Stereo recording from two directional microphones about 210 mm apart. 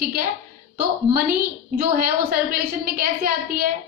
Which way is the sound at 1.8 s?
45° right (ahead or behind).